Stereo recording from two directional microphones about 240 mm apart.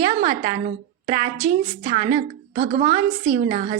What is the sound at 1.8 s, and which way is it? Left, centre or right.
A woman's voice, right.